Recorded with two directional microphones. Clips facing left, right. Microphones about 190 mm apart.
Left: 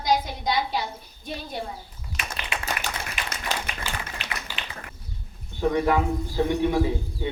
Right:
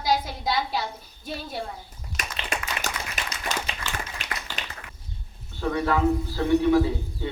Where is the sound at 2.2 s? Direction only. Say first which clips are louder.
Even; 45° right (ahead or behind).